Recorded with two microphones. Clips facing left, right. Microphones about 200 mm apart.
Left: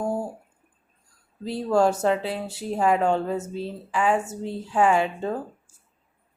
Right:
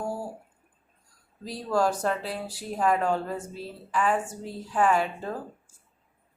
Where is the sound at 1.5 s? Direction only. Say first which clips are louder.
Left 5 dB; 25° left (ahead or behind).